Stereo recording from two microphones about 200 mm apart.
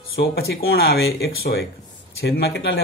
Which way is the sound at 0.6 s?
55° left (ahead or behind).